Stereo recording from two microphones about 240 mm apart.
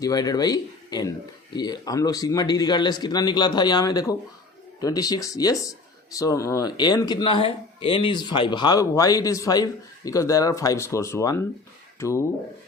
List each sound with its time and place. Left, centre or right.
0.0 s speech: centre